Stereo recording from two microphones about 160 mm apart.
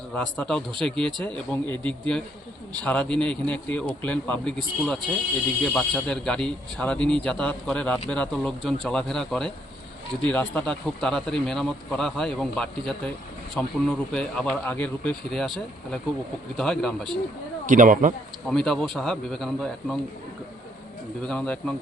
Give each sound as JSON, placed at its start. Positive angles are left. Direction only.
{"t": 0.1, "sound": "a man's voice", "side_deg": 5}
{"t": 17.7, "sound": "speech", "side_deg": -55}
{"t": 18.4, "sound": "speech", "side_deg": 5}
{"t": 21.2, "sound": "a man's voice", "side_deg": 5}